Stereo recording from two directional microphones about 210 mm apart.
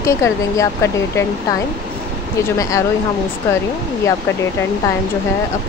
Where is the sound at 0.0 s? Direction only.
15° left (ahead or behind).